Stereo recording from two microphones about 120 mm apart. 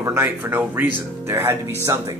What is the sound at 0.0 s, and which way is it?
Speech, 20° right (ahead or behind).